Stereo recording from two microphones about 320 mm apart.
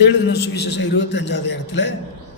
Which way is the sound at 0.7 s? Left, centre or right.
Left.